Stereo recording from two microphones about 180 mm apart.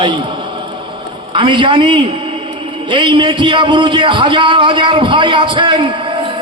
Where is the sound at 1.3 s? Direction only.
25° right (ahead or behind).